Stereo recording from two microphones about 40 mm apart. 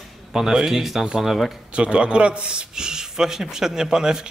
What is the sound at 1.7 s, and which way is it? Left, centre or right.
A man's voice, right.